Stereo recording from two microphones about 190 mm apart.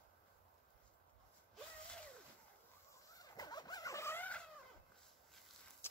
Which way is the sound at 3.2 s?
20° left (ahead or behind).